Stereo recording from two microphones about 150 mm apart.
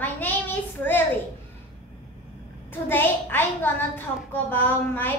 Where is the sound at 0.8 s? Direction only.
15° left (ahead or behind).